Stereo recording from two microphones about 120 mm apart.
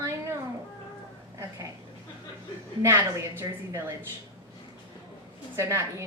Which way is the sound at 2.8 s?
20° right (ahead or behind).